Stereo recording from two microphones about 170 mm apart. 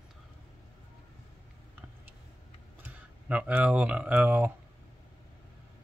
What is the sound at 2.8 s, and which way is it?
Speech, 10° right (ahead or behind).